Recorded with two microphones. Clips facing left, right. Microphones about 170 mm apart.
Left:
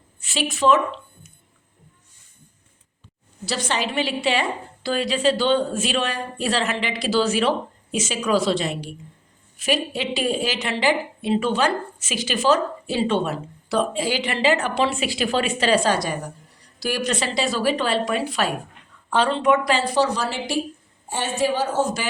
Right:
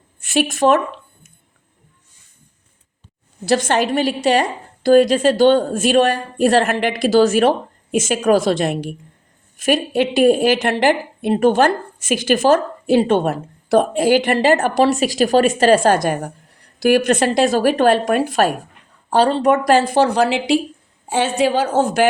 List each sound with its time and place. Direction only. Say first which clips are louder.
0.2 s speech: right 6 dB; 50° right (ahead or behind)
3.4 s a woman's voice: right 9 dB; 50° right (ahead or behind); by 20.6 s 70° right (ahead or behind)
21.1 s a woman's voice: right 6 dB; 80° right; by 22.0 s 65° right (ahead or behind)